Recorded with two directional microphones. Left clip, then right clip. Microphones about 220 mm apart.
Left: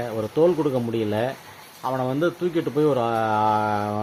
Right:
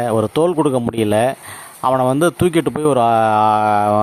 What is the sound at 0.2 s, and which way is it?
Speech, 50° right (ahead or behind).